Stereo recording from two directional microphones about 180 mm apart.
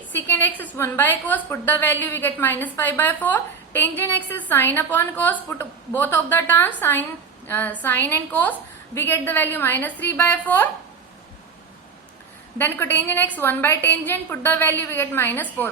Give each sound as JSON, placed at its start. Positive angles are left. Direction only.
{"t": 0.3, "sound": "a woman's voice", "side_deg": 10}
{"t": 12.5, "sound": "a woman's voice", "side_deg": 10}